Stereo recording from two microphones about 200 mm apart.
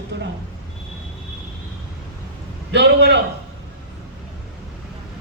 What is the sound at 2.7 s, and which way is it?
Speech, 60° right (ahead or behind).